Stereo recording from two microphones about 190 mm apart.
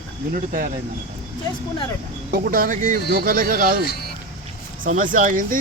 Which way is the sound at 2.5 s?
45° right (ahead or behind).